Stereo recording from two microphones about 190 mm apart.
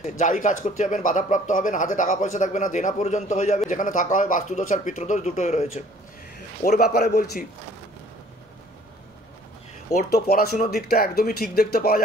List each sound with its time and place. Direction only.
0.2 s speech: 40° left (ahead or behind)
6.6 s speech: 50° left (ahead or behind)
10.2 s speech: 55° left (ahead or behind)